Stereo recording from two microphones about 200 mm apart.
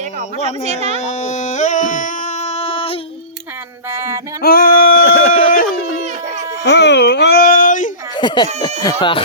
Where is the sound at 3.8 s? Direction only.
10° right (ahead or behind).